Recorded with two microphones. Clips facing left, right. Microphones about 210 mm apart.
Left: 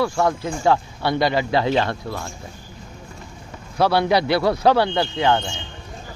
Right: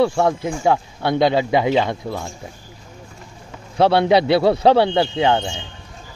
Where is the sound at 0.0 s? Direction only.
25° right (ahead or behind).